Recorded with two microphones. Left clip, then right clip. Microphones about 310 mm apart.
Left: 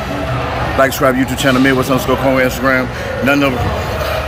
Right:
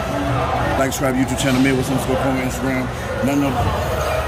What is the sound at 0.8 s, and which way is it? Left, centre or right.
Speech, centre.